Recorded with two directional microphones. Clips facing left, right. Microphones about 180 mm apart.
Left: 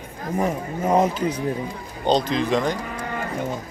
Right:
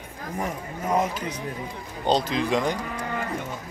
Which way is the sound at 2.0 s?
5° right (ahead or behind).